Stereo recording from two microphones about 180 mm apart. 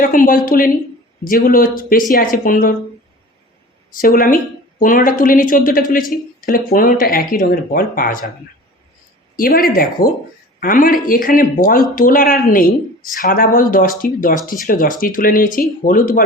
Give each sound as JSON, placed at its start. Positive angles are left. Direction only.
{"t": 0.0, "sound": "speech", "side_deg": 50}
{"t": 3.9, "sound": "speech", "side_deg": 50}
{"t": 9.3, "sound": "speech", "side_deg": 55}